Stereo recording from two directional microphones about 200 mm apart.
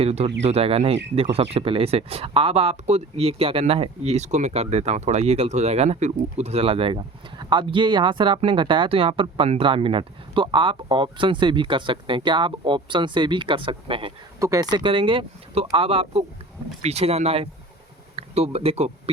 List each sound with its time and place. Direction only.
0.0 s speech: 30° right (ahead or behind)